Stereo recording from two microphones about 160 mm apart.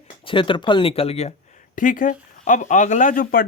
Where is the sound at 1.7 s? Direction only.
55° left (ahead or behind).